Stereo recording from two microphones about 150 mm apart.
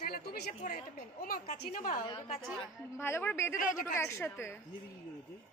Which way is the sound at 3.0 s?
15° left (ahead or behind).